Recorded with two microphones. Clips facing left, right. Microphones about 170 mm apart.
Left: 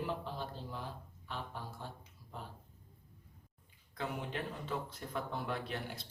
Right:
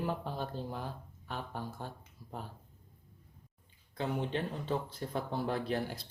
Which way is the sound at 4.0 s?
30° right (ahead or behind).